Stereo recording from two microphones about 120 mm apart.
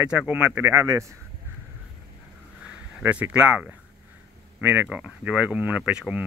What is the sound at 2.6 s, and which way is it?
Speech, 10° right (ahead or behind).